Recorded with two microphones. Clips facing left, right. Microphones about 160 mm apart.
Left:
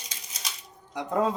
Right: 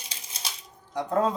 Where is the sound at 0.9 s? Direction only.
15° left (ahead or behind).